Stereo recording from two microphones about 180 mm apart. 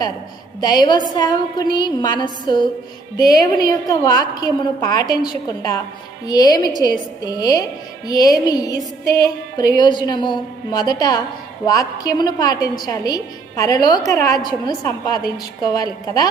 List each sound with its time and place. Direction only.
0.6 s a woman's voice: 25° left (ahead or behind)